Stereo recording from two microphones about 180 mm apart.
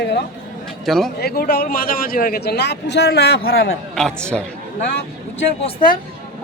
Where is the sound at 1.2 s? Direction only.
60° left (ahead or behind).